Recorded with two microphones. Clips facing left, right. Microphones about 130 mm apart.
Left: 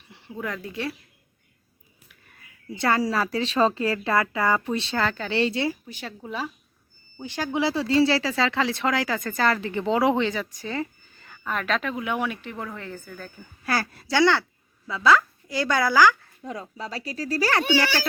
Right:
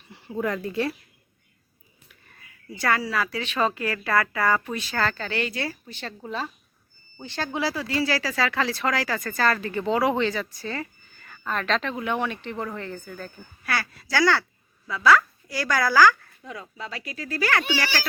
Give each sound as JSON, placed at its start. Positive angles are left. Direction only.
{"t": 0.4, "sound": "speech", "side_deg": 0}
{"t": 2.6, "sound": "speech", "side_deg": 25}
{"t": 3.0, "sound": "speech", "side_deg": 35}
{"t": 4.9, "sound": "a woman's voice", "side_deg": 15}
{"t": 5.3, "sound": "speech", "side_deg": 25}
{"t": 5.6, "sound": "a woman's voice", "side_deg": 10}
{"t": 11.4, "sound": "speech", "side_deg": 10}
{"t": 13.7, "sound": "speech", "side_deg": 35}
{"t": 14.1, "sound": "speech", "side_deg": 20}
{"t": 16.4, "sound": "speech", "side_deg": 35}